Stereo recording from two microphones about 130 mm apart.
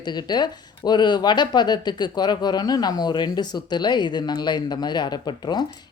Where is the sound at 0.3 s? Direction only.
35° left (ahead or behind).